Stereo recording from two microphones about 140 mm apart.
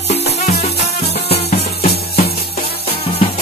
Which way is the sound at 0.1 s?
50° left (ahead or behind).